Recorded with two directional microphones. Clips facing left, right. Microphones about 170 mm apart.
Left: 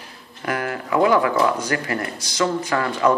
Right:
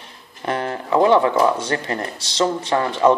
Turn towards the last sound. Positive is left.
turn(degrees=-25)  # may be behind; listen again after turning